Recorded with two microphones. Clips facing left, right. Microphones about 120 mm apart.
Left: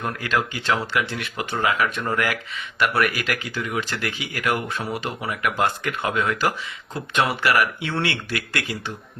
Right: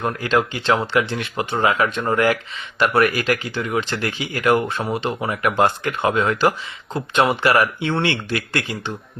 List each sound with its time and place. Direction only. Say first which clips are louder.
0.0 s speech: right 5 dB; 30° right (ahead or behind)